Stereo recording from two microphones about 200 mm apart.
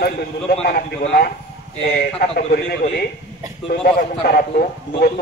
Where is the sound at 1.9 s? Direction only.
50° left (ahead or behind).